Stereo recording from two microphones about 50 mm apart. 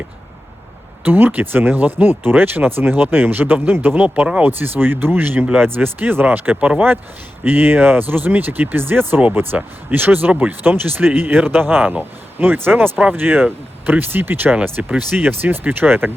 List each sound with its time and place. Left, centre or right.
1.0 s speech: right
4.4 s speech: right
7.4 s speech: right